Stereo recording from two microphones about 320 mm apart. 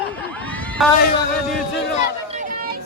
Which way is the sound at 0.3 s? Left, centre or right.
Centre.